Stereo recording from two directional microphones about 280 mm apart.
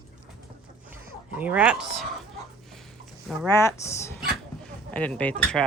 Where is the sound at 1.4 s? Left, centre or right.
Centre.